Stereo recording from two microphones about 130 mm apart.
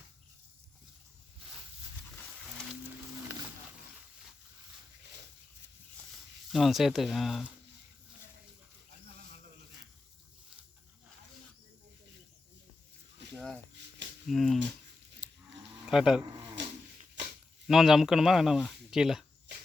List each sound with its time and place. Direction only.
6.5 s speech: centre (ahead or behind)
13.3 s a sound: 10° left (ahead or behind)
14.3 s speech: centre (ahead or behind)
15.9 s speech: 5° right (ahead or behind)
17.7 s speech: 5° right (ahead or behind)